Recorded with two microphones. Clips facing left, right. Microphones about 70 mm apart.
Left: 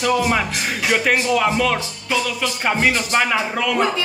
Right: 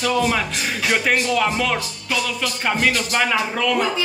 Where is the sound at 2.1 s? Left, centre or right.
Centre.